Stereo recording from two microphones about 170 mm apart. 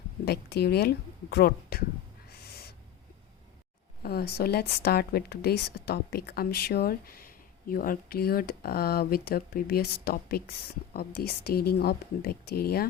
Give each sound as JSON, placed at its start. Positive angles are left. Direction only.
{"t": 0.3, "sound": "speech", "side_deg": 70}
{"t": 2.3, "sound": "owl", "side_deg": 65}
{"t": 4.0, "sound": "speech", "side_deg": 70}